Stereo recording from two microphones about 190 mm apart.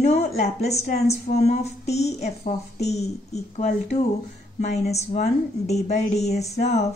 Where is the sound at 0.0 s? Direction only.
35° left (ahead or behind).